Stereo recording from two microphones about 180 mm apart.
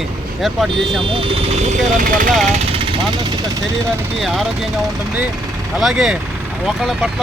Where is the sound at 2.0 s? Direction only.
50° right (ahead or behind).